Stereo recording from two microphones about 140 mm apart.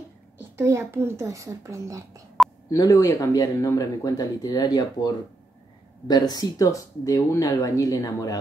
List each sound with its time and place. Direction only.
0.4 s a child's voice: 20° right (ahead or behind)
2.7 s speech: 25° left (ahead or behind)